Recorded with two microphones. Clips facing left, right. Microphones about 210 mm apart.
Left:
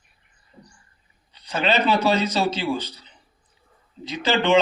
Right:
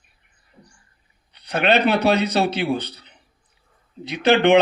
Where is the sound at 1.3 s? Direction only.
65° right (ahead or behind).